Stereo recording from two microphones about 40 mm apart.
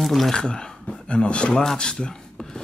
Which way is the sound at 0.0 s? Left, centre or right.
Centre.